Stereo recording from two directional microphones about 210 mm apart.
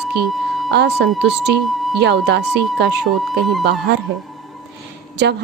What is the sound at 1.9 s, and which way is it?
A woman's voice, 55° right (ahead or behind).